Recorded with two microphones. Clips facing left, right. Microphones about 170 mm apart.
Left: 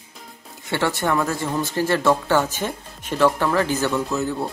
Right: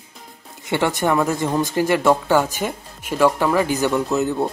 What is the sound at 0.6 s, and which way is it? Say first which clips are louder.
Speech: right 3 dB; 15° right (ahead or behind).